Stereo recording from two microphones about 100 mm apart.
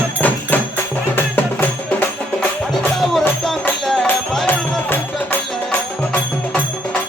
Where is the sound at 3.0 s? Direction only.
Centre (ahead or behind).